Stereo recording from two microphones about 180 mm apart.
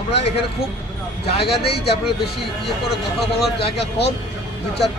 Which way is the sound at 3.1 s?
Centre (ahead or behind).